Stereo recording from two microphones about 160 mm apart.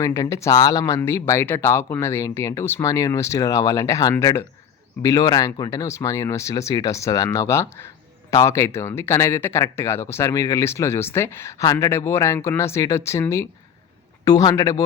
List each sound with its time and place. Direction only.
0.0 s speech: 20° left (ahead or behind)